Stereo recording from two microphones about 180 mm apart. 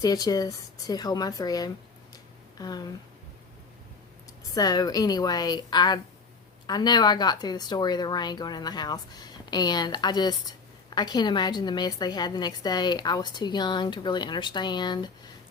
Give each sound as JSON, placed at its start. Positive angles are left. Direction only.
{"t": 0.0, "sound": "speech", "side_deg": 20}
{"t": 4.5, "sound": "speech", "side_deg": 20}